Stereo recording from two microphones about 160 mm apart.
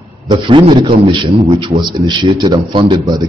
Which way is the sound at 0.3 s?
30° right (ahead or behind).